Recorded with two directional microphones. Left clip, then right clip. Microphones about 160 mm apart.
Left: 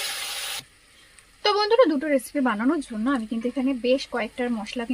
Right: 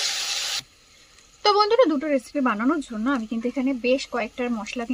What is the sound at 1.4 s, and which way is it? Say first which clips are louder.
Speech: right 1 dB; centre (ahead or behind).